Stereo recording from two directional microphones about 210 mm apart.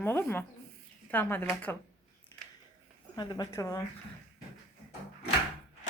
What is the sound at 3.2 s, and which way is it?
Speech, 20° left (ahead or behind).